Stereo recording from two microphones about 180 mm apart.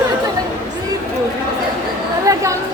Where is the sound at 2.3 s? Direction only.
20° right (ahead or behind).